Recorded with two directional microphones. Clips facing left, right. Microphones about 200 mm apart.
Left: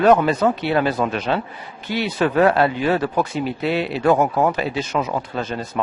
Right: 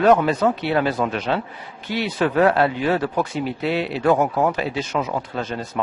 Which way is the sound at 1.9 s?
10° left (ahead or behind).